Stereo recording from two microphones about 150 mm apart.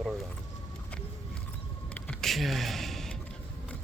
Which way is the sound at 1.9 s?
5° left (ahead or behind).